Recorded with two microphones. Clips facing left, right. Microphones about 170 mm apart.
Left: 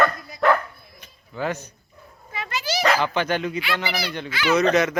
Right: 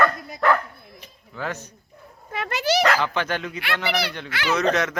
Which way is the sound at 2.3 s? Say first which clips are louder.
Right 5 dB; 60° right (ahead or behind).